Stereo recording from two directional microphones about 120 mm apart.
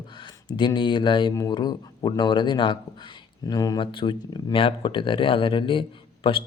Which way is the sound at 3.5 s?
30° left (ahead or behind).